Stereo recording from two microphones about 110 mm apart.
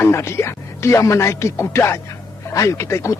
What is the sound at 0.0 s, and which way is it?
Music, 25° left (ahead or behind).